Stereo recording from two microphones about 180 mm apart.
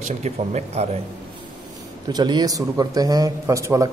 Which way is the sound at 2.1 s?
25° right (ahead or behind).